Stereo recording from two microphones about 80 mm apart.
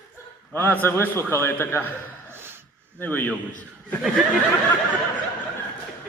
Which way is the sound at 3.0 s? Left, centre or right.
Left.